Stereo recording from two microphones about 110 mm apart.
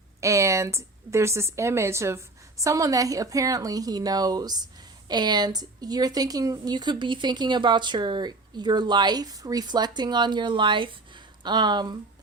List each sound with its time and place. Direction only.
0.2 s a woman's voice: 25° right (ahead or behind)